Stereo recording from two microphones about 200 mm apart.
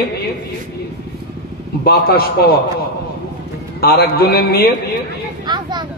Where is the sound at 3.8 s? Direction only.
50° left (ahead or behind).